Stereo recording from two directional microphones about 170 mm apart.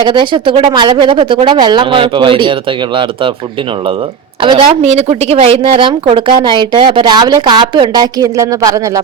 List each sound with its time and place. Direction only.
0.0 s a woman's voice: 30° right (ahead or behind)
4.4 s a woman's voice: 30° right (ahead or behind)